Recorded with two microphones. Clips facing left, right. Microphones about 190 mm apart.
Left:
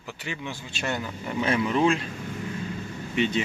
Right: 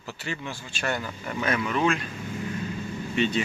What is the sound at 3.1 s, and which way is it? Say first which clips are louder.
Speech: even; 15° left (ahead or behind).